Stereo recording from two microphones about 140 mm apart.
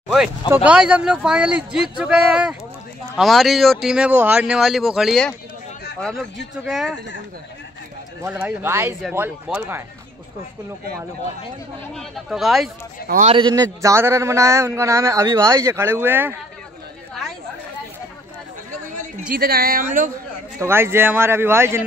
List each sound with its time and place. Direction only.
0.7 s a man's voice: 10° right (ahead or behind)
8.2 s a man's voice: 10° right (ahead or behind)
11.9 s speech: centre (ahead or behind)
13.2 s a man's voice: 40° right (ahead or behind); by 16.3 s 15° right (ahead or behind)
19.3 s speech: 90° right; by 20.1 s 75° right (ahead or behind)
20.5 s a man's voice: 20° right (ahead or behind)